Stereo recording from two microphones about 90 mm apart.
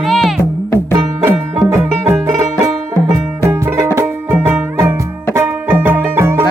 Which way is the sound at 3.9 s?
30° right (ahead or behind).